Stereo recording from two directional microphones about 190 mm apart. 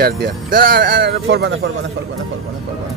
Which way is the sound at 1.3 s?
75° right (ahead or behind).